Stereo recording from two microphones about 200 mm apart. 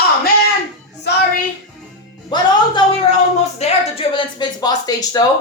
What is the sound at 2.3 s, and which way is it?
Music, 20° left (ahead or behind).